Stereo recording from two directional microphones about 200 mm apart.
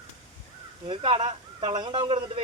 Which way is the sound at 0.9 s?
25° right (ahead or behind).